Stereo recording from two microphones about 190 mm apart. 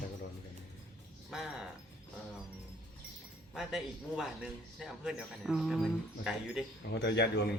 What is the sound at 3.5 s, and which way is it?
Speech, 5° right (ahead or behind).